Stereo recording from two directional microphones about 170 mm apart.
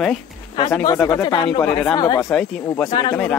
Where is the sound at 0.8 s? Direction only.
20° left (ahead or behind).